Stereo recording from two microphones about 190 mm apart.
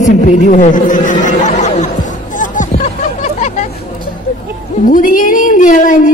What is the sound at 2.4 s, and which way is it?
Hubbub, 40° left (ahead or behind).